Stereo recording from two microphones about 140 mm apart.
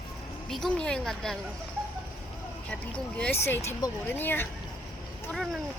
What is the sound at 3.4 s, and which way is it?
A woman's voice, 20° left (ahead or behind).